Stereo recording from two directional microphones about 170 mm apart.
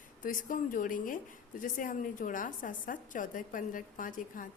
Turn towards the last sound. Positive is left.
turn(degrees=50)  # may be behind; listen again after turning